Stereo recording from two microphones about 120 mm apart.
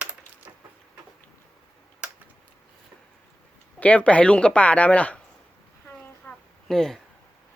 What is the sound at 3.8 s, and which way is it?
Speech, 10° left (ahead or behind).